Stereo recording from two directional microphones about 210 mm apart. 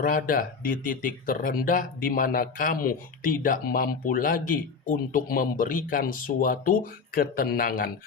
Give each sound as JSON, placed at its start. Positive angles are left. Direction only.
{"t": 0.0, "sound": "speech", "side_deg": 40}